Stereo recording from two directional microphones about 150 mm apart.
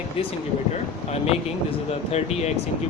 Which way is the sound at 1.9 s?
45° left (ahead or behind).